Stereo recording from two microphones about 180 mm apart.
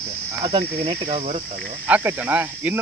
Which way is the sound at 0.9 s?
35° right (ahead or behind).